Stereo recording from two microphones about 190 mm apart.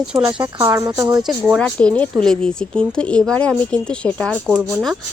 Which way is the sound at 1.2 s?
Centre (ahead or behind).